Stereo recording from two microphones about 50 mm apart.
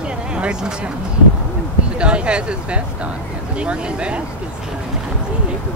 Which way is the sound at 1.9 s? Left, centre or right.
Right.